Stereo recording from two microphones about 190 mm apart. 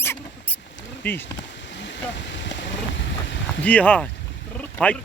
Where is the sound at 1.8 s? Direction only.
70° left (ahead or behind).